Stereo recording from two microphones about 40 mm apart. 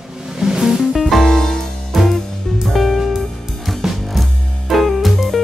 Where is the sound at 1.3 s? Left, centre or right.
Centre.